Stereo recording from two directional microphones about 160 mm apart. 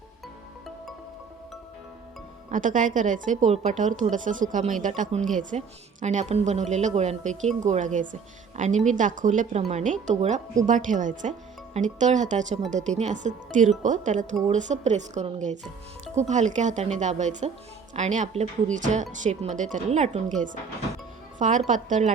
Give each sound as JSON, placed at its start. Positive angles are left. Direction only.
{"t": 2.5, "sound": "a woman's voice", "side_deg": -55}